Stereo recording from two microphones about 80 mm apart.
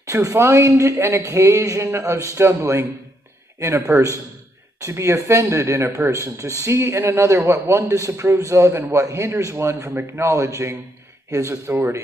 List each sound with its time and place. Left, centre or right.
0.0 s speech: right